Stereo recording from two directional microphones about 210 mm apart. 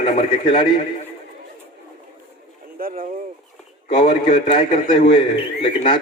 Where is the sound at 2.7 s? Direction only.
40° right (ahead or behind).